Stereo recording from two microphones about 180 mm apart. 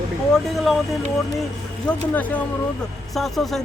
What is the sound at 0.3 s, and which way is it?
Speech, centre (ahead or behind).